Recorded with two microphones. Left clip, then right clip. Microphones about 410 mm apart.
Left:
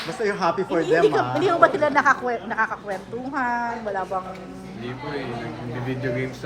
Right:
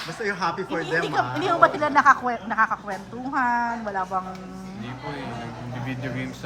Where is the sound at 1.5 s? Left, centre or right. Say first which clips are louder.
Left 1 dB; centre.